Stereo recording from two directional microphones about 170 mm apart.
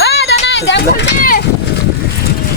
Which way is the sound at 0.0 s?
90° left.